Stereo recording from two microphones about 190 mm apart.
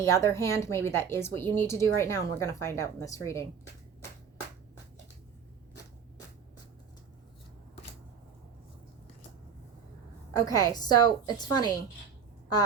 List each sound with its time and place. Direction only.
0.0 s a woman's voice: 15° left (ahead or behind)
10.3 s a woman's voice: 20° left (ahead or behind)